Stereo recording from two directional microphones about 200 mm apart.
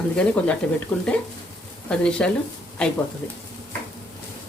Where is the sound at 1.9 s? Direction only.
5° left (ahead or behind).